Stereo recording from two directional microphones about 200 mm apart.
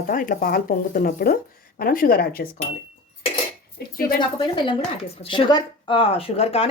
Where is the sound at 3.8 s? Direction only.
50° left (ahead or behind).